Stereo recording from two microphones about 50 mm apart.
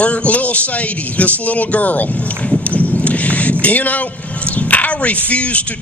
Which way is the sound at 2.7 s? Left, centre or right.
Left.